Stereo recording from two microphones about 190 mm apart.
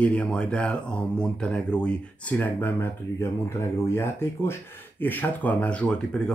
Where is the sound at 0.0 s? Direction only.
5° left (ahead or behind).